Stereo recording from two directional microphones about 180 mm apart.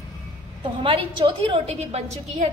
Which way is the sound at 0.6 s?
30° right (ahead or behind).